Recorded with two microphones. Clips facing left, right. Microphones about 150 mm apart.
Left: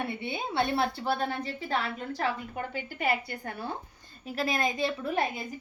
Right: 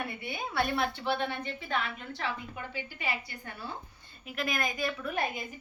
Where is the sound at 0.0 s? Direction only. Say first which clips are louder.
Left 4 dB; 25° left (ahead or behind); by 3.7 s 50° left (ahead or behind).